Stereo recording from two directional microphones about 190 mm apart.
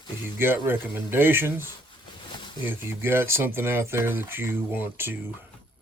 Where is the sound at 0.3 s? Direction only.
10° right (ahead or behind).